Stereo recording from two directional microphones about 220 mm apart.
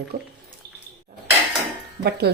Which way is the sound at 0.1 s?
45° right (ahead or behind).